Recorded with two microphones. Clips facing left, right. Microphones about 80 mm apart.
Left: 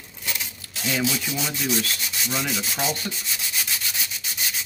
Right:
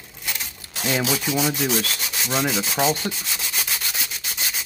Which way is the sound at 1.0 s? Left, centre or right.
Right.